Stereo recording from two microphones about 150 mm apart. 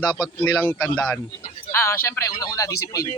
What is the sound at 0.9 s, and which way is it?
Speech, 5° left (ahead or behind).